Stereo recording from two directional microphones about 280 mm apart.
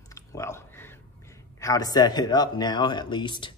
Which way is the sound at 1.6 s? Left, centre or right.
Centre.